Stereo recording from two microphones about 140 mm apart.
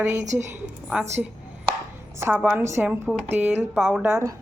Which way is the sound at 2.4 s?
5° right (ahead or behind).